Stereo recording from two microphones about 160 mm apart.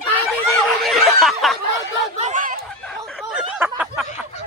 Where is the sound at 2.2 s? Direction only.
50° right (ahead or behind).